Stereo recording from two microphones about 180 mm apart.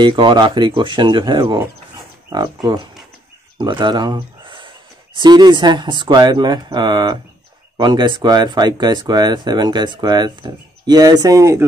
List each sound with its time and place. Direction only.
0.0 s speech: 25° right (ahead or behind)